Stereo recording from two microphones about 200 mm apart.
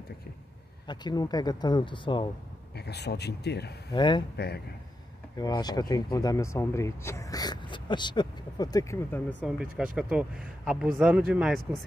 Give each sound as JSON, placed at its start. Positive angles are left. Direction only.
{"t": 0.8, "sound": "speech", "side_deg": 20}
{"t": 2.9, "sound": "speech", "side_deg": 55}
{"t": 3.9, "sound": "speech", "side_deg": 25}
{"t": 5.4, "sound": "speech", "side_deg": 20}
{"t": 9.4, "sound": "speech", "side_deg": -5}